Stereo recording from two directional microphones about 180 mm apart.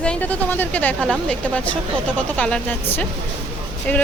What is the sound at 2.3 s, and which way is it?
Speech, 5° left (ahead or behind).